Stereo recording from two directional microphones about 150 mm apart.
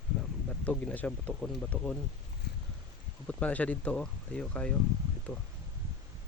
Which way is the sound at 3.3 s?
10° left (ahead or behind).